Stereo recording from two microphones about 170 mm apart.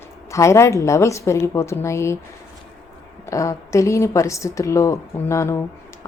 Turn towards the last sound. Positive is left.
turn(degrees=15)  # may be behind; listen again after turning